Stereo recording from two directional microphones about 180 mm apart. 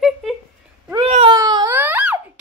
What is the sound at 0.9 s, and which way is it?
Baby cry, 35° right (ahead or behind).